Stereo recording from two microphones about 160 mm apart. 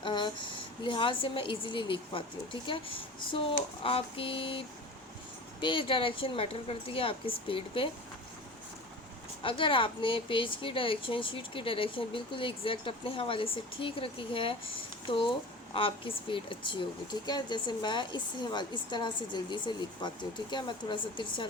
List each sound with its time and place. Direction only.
0.0 s a sound: 30° left (ahead or behind)
0.9 s a woman's voice: 30° left (ahead or behind)
9.4 s a woman's voice: 30° left (ahead or behind)